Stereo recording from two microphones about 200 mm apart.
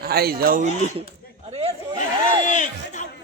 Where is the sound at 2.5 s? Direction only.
40° left (ahead or behind).